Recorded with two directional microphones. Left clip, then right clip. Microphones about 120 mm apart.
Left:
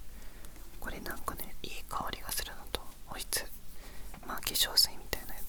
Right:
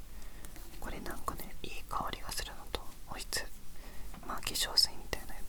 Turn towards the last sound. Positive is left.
turn(degrees=20)  # may be behind; listen again after turning